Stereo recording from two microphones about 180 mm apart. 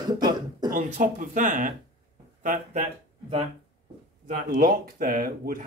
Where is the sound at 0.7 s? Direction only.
45° right (ahead or behind).